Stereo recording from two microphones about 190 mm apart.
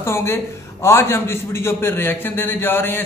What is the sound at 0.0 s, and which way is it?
A man's voice, 15° left (ahead or behind).